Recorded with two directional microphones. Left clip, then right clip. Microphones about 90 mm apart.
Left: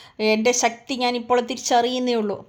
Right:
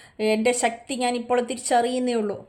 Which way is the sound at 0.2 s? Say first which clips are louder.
Left 2 dB; 25° left (ahead or behind).